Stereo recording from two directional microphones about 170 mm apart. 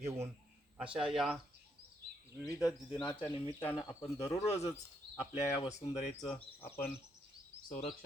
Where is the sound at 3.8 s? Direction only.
35° left (ahead or behind).